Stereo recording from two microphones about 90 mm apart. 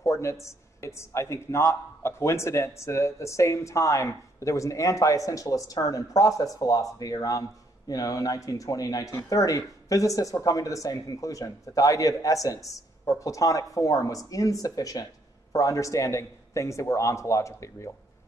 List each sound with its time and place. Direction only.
0.0 s speech: 35° left (ahead or behind)